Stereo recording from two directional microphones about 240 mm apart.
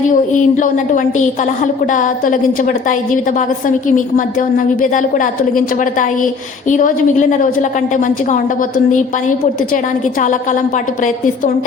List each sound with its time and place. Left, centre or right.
0.1 s a woman's voice: left